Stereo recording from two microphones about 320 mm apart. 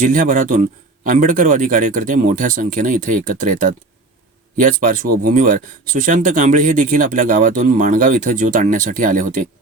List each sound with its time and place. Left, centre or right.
0.0 s speech: right